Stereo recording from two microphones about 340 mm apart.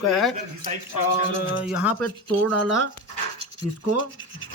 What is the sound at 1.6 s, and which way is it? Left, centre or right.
Speech, centre.